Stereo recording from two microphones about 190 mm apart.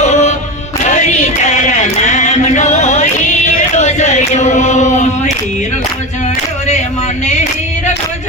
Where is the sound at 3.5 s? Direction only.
40° left (ahead or behind).